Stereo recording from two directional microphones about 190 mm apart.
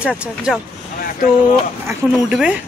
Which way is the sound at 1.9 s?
5° right (ahead or behind).